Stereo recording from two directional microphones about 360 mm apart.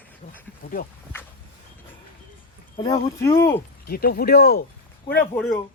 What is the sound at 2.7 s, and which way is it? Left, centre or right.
Speech, centre.